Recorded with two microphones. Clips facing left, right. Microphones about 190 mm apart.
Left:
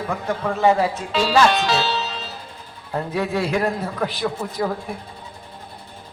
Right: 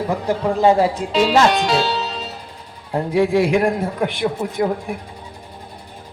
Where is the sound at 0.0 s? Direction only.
25° right (ahead or behind).